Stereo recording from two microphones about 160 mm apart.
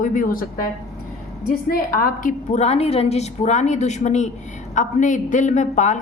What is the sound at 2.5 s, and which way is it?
A woman's voice, 40° left (ahead or behind).